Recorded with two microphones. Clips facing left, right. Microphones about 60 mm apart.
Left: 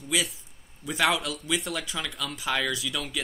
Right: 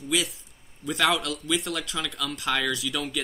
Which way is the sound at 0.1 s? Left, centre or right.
Centre.